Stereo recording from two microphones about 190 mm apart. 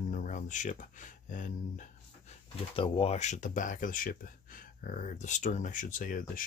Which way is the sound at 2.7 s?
30° left (ahead or behind).